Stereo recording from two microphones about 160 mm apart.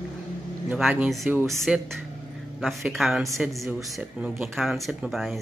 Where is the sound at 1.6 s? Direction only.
Centre (ahead or behind).